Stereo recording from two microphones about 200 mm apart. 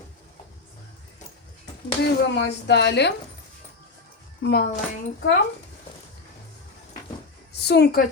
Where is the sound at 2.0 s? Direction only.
60° left (ahead or behind).